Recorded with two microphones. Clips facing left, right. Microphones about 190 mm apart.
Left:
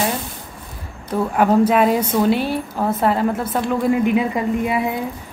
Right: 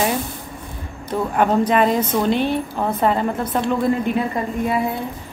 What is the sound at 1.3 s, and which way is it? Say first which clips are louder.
A woman's voice: left 2 dB; 5° left (ahead or behind).